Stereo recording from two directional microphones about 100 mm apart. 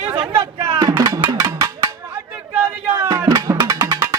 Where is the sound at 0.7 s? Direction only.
35° right (ahead or behind).